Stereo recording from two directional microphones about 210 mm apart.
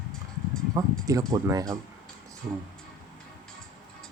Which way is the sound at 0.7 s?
15° right (ahead or behind).